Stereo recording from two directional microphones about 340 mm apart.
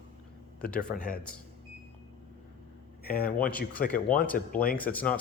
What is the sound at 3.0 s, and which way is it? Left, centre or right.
Speech, left.